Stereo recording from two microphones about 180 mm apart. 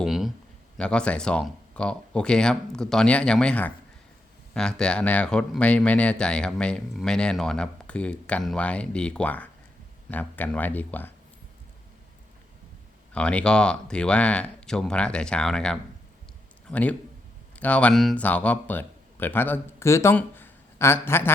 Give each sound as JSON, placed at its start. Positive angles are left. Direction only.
{"t": 0.0, "sound": "a sound", "side_deg": 0}
{"t": 0.8, "sound": "speech", "side_deg": 5}
{"t": 13.1, "sound": "speech", "side_deg": 5}